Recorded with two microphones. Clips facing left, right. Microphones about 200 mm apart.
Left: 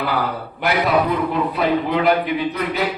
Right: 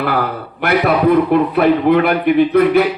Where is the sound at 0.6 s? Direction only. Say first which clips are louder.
Right 5 dB; 60° right (ahead or behind).